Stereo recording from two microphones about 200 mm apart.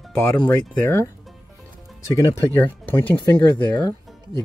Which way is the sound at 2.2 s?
10° left (ahead or behind).